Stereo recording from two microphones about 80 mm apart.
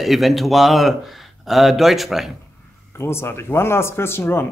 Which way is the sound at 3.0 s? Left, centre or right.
Left.